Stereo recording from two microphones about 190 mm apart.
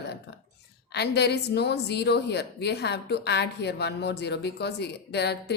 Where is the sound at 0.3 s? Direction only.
65° left (ahead or behind).